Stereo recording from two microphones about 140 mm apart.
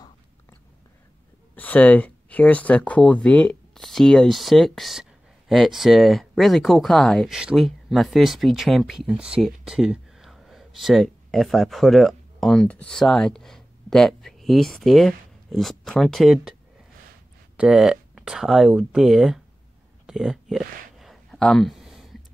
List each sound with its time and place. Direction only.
1.5 s speech: 10° left (ahead or behind)
17.6 s speech: 5° right (ahead or behind)
20.1 s a sound: centre (ahead or behind)